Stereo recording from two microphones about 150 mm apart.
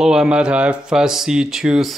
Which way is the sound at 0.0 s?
5° right (ahead or behind).